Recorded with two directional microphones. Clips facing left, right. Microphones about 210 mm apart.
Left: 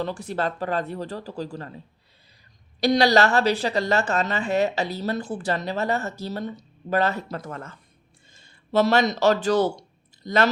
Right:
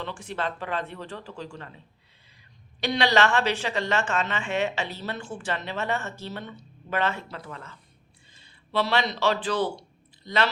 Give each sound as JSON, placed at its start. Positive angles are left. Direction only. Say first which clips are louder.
{"t": 0.0, "sound": "a woman's voice", "louder": "left 5 dB", "side_deg": 40}
{"t": 2.8, "sound": "a woman's voice", "louder": "left 5 dB", "side_deg": 40}